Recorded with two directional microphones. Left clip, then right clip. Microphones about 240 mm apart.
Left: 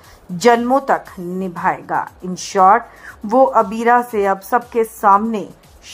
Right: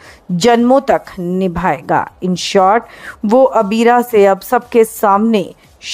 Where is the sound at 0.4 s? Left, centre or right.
Right.